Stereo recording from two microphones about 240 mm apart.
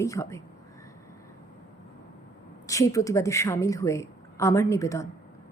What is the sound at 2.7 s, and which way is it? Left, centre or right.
A woman's voice, centre.